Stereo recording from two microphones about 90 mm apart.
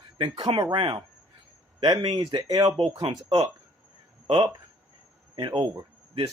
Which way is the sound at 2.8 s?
90° right.